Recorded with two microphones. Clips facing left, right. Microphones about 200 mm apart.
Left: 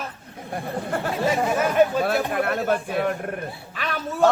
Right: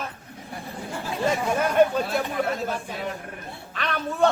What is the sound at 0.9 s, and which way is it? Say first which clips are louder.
Chatter: left 6 dB; 65° left (ahead or behind).